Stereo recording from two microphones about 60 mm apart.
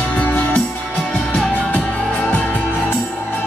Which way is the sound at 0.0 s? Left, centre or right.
Left.